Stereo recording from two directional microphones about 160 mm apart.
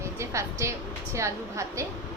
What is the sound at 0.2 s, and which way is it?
Speech, 20° right (ahead or behind).